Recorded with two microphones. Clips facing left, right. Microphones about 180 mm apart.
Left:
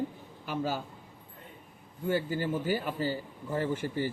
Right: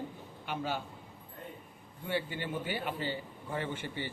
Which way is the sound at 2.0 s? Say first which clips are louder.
Left 6 dB; 40° left (ahead or behind).